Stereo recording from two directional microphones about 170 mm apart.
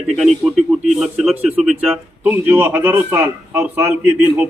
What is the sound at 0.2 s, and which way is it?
A man's voice, centre (ahead or behind).